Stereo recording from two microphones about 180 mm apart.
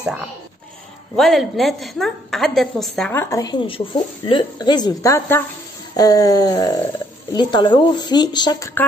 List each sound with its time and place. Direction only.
1.1 s a woman's voice: centre (ahead or behind)
3.1 s speech: 15° left (ahead or behind)